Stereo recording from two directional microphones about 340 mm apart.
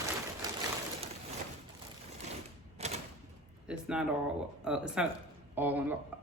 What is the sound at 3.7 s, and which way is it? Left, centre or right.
Speech, centre.